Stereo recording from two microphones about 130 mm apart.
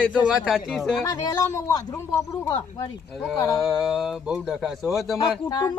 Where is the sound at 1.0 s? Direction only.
30° left (ahead or behind).